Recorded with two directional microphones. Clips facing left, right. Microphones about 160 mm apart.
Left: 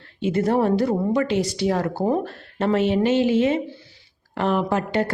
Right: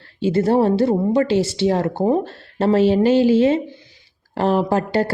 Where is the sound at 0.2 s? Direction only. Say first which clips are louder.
Right 4 dB; 30° right (ahead or behind).